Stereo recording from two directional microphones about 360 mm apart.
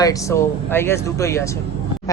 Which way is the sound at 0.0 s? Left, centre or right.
Centre.